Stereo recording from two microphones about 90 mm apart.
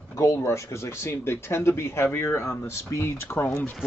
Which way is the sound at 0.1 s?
35° left (ahead or behind).